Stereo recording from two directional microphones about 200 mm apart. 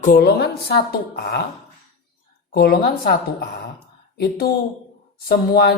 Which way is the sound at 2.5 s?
50° left (ahead or behind).